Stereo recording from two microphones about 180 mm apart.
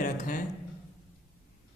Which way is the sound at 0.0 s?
45° left (ahead or behind).